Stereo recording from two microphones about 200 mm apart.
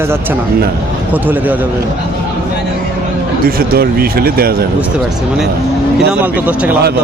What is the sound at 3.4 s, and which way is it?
Speech, 50° right (ahead or behind).